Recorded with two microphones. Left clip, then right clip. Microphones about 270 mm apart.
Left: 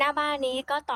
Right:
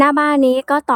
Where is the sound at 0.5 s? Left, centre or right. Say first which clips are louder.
Right 13 dB; right.